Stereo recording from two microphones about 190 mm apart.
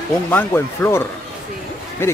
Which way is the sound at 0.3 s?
10° left (ahead or behind).